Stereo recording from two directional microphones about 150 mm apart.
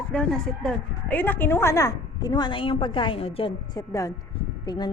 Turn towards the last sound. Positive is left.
turn(degrees=30)  # may be behind; listen again after turning